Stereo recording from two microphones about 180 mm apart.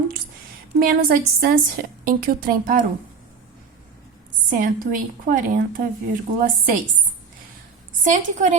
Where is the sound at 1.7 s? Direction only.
50° right (ahead or behind).